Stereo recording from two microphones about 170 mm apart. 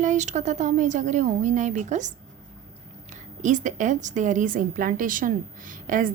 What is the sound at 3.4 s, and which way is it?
A woman's voice, 45° right (ahead or behind).